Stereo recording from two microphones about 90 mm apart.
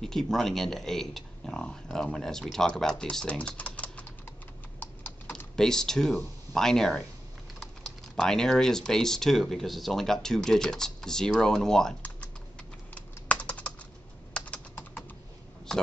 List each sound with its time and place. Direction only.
0.0 s speech: 5° left (ahead or behind)
4.7 s computer keyboard: 20° left (ahead or behind)
5.6 s speech: 5° left (ahead or behind)
8.2 s speech: 5° left (ahead or behind)
12.0 s typing: 15° left (ahead or behind)